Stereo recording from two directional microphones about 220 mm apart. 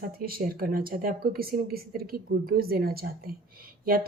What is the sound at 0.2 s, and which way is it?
A woman's voice, 40° right (ahead or behind).